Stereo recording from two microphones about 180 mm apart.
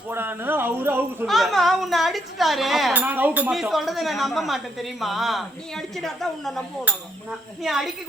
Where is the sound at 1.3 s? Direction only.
Centre (ahead or behind).